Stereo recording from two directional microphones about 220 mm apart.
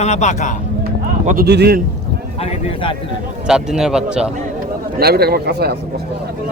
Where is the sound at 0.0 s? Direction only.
30° left (ahead or behind).